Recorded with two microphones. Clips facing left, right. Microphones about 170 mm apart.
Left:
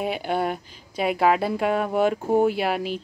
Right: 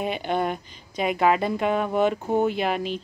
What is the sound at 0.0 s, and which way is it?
Speech, 5° left (ahead or behind).